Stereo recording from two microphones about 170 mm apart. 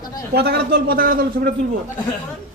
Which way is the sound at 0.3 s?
70° right (ahead or behind).